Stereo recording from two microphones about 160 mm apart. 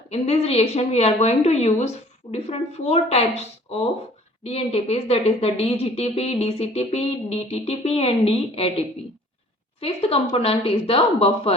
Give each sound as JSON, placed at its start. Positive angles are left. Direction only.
{"t": 0.1, "sound": "speech", "side_deg": 40}
{"t": 9.8, "sound": "speech", "side_deg": 40}